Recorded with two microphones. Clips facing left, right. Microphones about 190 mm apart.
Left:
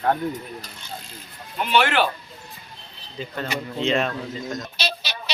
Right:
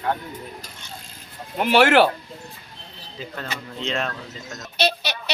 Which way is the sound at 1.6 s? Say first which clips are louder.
Right 5 dB; 75° right (ahead or behind).